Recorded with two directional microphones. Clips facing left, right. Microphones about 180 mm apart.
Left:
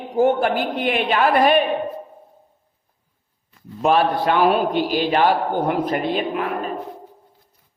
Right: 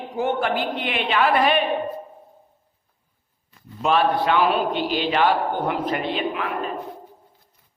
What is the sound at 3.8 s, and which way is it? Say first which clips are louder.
A man's voice: left 2 dB; 45° left (ahead or behind).